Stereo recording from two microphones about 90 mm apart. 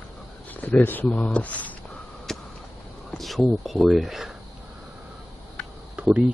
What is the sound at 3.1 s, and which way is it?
Speech, centre (ahead or behind).